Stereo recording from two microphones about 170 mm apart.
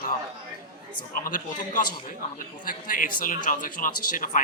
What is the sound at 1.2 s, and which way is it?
A man's voice, 55° left (ahead or behind).